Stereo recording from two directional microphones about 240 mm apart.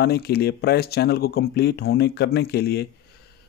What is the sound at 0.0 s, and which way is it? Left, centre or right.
Speech, left.